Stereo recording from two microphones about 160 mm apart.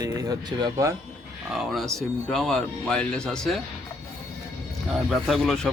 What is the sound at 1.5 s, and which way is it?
Speech, centre (ahead or behind).